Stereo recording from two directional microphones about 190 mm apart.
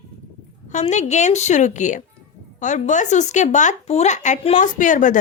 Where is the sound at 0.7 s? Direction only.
40° left (ahead or behind).